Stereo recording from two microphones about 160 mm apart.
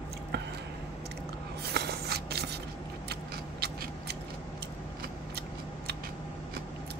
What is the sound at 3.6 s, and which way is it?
Scissors, 85° right.